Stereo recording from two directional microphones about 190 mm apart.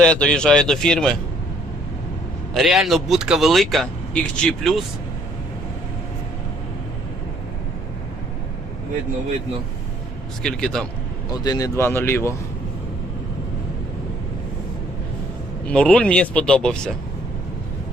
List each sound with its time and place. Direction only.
0.0 s speech: 5° left (ahead or behind)
2.5 s speech: centre (ahead or behind)
10.4 s speech: 5° left (ahead or behind)
11.3 s speech: 20° left (ahead or behind)
15.6 s speech: 5° left (ahead or behind)